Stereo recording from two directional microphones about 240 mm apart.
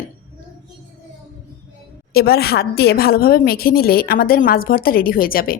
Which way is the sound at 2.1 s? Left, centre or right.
Left.